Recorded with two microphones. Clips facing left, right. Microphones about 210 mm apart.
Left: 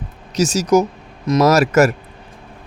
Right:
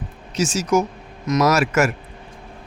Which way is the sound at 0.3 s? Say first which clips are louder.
Left 4 dB; 40° left (ahead or behind).